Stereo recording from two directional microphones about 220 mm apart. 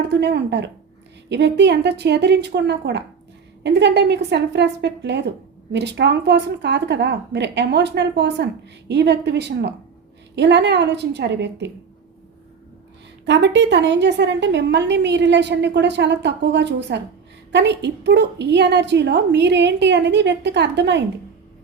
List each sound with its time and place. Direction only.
0.1 s a woman's voice: 50° right (ahead or behind)
13.2 s a woman's voice: 55° right (ahead or behind)